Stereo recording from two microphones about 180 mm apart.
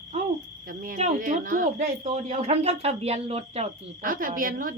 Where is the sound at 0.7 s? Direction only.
50° right (ahead or behind); by 3.7 s 35° right (ahead or behind).